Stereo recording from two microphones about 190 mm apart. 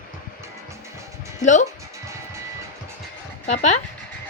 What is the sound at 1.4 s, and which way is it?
Music, 40° left (ahead or behind).